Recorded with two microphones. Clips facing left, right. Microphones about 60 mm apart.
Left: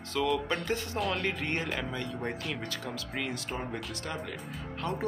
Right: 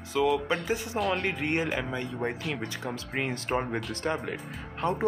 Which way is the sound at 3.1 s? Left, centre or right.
Right.